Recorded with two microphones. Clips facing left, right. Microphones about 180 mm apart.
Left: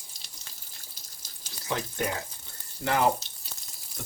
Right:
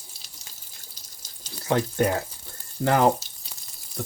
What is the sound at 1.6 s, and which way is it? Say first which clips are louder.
Speech: right 8 dB; 55° right (ahead or behind).